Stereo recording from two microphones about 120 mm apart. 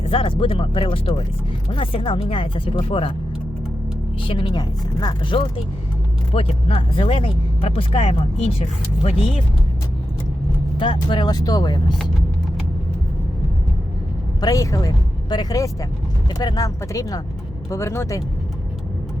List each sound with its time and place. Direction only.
0.1 s speech: 50° left (ahead or behind)
4.3 s speech: 45° left (ahead or behind)
11.1 s speech: 35° left (ahead or behind)
14.4 s speech: 30° left (ahead or behind)